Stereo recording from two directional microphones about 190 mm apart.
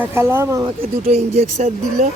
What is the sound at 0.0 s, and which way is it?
Speech, 10° right (ahead or behind).